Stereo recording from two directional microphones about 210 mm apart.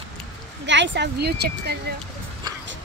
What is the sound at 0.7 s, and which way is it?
Speech, 55° right (ahead or behind).